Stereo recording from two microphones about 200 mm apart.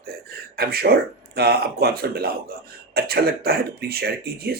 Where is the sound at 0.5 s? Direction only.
50° right (ahead or behind).